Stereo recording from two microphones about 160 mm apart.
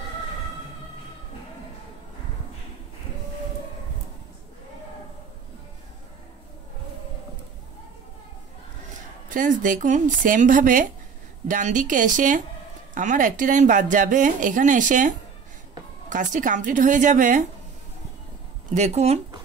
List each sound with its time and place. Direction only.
9.3 s speech: 55° right (ahead or behind)
18.8 s speech: 45° right (ahead or behind)